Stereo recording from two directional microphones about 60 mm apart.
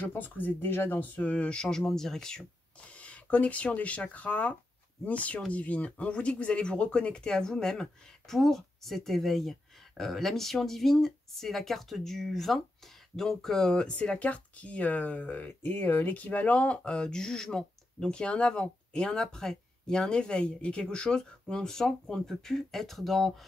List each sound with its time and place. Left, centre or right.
0.1 s speech: left; by 13.9 s centre
13.9 s speech: left
16.1 s speech: left; by 23.4 s centre